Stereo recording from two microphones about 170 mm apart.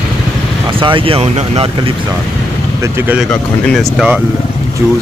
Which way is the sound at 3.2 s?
5° left (ahead or behind).